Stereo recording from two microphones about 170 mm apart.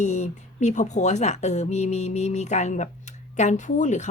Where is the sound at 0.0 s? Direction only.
45° left (ahead or behind).